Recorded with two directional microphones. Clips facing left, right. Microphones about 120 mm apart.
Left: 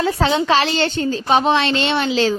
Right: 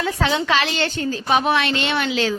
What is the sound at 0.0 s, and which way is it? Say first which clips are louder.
A child's voice: left 4 dB; 30° left (ahead or behind).